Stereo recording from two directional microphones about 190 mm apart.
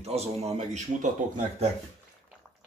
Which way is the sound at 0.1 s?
35° right (ahead or behind).